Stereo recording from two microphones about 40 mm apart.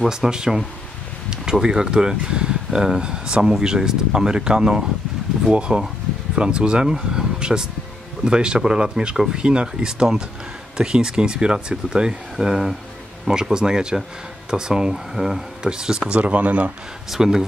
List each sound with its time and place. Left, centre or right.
0.1 s speech: centre
9.1 s speech: centre
9.4 s speech: right
15.6 s speech: centre
16.2 s speech: right
17.1 s speech: centre